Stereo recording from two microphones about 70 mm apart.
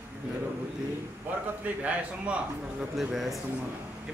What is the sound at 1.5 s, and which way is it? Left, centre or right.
A man's voice, right.